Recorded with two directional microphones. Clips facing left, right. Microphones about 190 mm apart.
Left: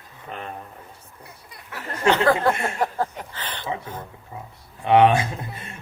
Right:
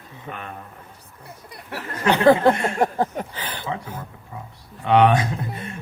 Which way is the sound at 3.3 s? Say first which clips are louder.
Right 2 dB; 10° right (ahead or behind).